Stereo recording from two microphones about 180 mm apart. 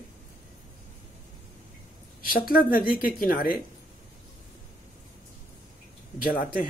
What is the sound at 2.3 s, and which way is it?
Speech, 50° left (ahead or behind).